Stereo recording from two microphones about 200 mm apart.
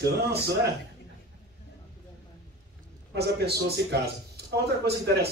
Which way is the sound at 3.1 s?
55° right (ahead or behind).